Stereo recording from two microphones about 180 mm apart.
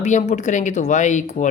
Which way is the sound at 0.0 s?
40° left (ahead or behind).